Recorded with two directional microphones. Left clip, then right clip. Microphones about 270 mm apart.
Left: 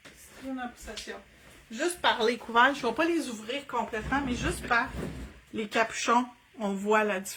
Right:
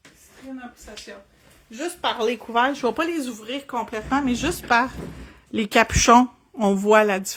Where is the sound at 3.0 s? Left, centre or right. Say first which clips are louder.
Right 3 dB; right.